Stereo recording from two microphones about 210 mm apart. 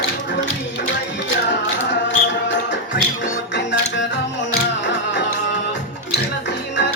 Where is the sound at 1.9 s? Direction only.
60° left (ahead or behind).